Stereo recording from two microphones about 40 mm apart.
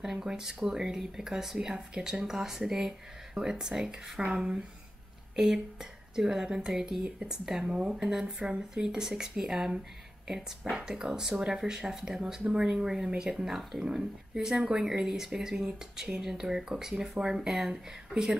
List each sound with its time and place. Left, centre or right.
0.0 s a woman's voice: centre